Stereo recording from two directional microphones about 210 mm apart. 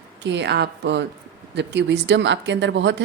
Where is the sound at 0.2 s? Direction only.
55° right (ahead or behind).